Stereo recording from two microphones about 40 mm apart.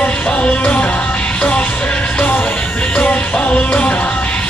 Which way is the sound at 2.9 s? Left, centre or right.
Left.